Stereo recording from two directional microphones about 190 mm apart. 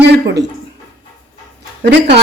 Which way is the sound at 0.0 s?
60° right (ahead or behind).